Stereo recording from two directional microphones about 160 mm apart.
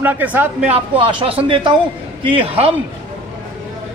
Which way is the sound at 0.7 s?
35° right (ahead or behind).